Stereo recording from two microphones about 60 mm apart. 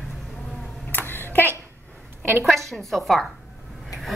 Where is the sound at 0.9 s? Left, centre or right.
Left.